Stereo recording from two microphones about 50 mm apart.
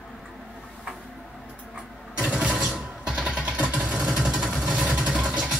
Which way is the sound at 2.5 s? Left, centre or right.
Centre.